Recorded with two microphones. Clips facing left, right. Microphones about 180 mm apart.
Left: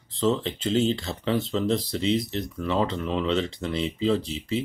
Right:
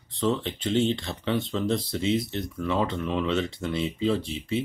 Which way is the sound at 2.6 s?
30° left (ahead or behind).